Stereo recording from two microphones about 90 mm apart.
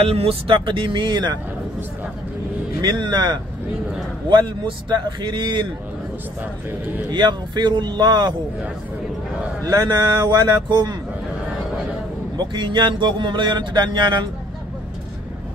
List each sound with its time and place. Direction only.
0.0 s speech: 90° right; by 1.4 s 55° right (ahead or behind)
2.8 s speech: 55° right (ahead or behind)
7.1 s speech: 55° right (ahead or behind)
9.7 s speech: 35° right (ahead or behind)
10.7 s speech: 55° right (ahead or behind)
12.4 s speech: 55° right (ahead or behind)